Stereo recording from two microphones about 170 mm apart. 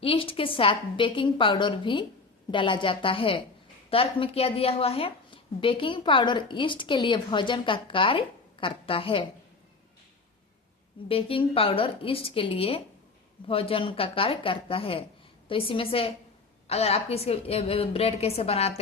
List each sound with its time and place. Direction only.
0.0 s a woman's voice: 35° left (ahead or behind)
11.1 s a woman's voice: 35° left (ahead or behind)